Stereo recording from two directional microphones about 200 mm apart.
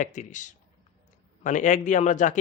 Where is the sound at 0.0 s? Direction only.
40° left (ahead or behind).